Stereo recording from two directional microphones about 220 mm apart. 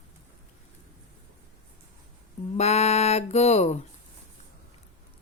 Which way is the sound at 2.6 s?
30° left (ahead or behind).